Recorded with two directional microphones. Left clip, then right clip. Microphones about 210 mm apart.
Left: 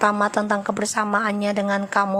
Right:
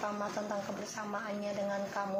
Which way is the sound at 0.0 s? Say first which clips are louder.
Left 17 dB; 45° left (ahead or behind).